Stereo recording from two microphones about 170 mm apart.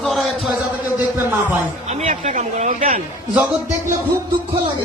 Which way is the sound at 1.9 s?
40° right (ahead or behind).